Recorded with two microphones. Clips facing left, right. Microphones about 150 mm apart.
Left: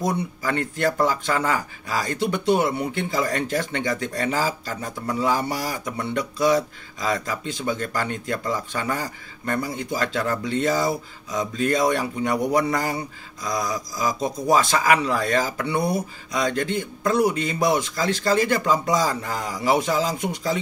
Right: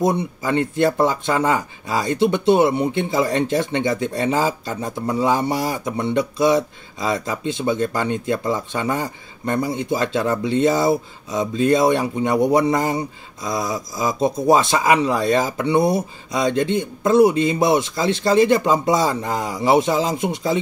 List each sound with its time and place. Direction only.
0.0 s speech: 20° right (ahead or behind)